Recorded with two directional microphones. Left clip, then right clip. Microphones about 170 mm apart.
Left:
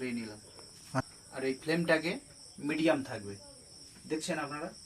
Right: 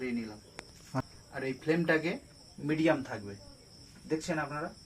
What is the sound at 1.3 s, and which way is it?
Speech, 15° right (ahead or behind).